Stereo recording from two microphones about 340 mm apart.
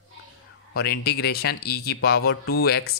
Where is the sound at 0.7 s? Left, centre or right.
Left.